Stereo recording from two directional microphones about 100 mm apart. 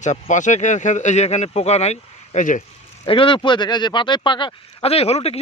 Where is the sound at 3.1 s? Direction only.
60° left (ahead or behind).